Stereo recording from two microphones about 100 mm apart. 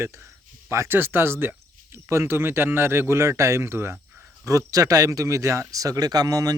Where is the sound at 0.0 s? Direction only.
25° right (ahead or behind).